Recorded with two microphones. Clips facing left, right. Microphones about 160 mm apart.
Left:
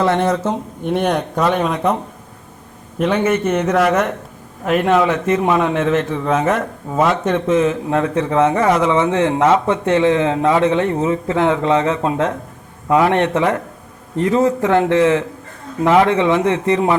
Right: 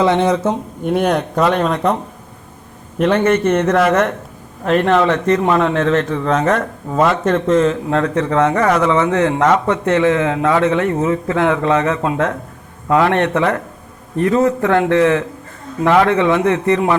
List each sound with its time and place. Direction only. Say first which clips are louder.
0.0 s speech: right 2 dB; 15° right (ahead or behind)
0.9 s a man's voice: right 2 dB; 5° right (ahead or behind)
3.0 s a man's voice: right 3 dB; centre (ahead or behind)
7.6 s a man's voice: right 1 dB; 15° left (ahead or behind)